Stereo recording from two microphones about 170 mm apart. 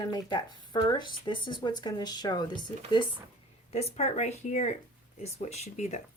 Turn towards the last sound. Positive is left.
turn(degrees=40)  # may be behind; listen again after turning